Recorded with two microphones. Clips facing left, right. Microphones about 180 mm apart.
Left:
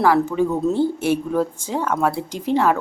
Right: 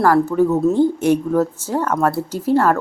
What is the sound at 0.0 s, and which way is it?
A man's voice, 10° left (ahead or behind).